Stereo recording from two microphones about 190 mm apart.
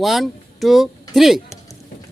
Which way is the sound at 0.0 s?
Centre (ahead or behind).